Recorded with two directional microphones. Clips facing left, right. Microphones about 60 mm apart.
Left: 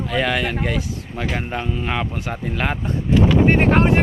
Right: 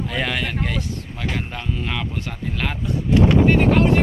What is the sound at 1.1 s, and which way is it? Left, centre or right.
Speech, left.